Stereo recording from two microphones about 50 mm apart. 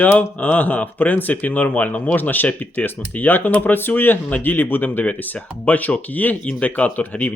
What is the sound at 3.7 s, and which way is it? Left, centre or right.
Speech, left.